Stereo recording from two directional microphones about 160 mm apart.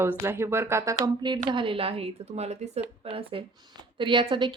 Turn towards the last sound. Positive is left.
turn(degrees=-30)  # may be behind; listen again after turning